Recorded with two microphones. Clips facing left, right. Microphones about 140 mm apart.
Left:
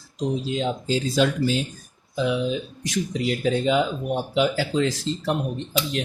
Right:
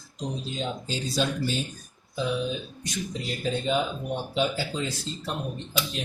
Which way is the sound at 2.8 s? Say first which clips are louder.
Left 7 dB; 90° left.